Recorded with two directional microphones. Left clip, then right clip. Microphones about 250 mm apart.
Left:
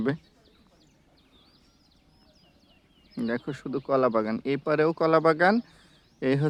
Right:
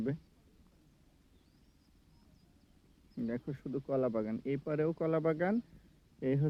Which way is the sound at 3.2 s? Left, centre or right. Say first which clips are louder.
Left 9 dB; centre.